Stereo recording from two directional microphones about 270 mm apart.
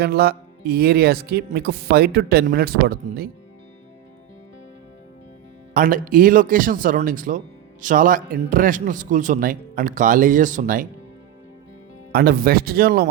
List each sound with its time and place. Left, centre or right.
0.0 s speech: right
5.7 s speech: right
12.1 s speech: right